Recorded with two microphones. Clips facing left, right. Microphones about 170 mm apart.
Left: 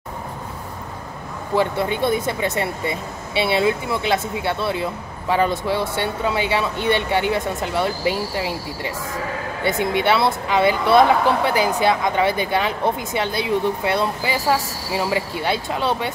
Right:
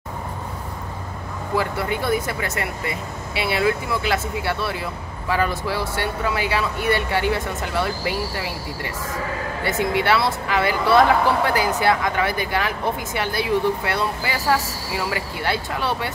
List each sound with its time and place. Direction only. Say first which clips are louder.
1.5 s speech: left 3 dB; 25° left (ahead or behind)